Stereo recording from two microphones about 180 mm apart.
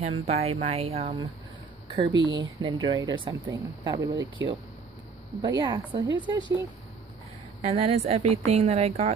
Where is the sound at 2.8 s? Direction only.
20° right (ahead or behind).